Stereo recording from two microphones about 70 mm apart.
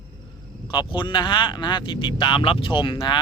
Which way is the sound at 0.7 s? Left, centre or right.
Left.